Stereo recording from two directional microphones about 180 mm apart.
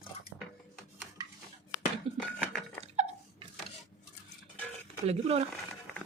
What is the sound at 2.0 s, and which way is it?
Dishes, 30° right (ahead or behind).